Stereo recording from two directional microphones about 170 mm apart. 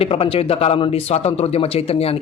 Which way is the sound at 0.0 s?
35° left (ahead or behind).